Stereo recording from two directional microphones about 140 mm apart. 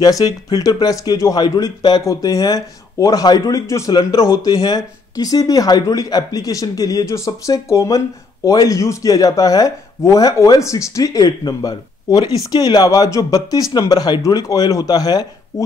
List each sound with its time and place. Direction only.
0.0 s speech: 30° left (ahead or behind)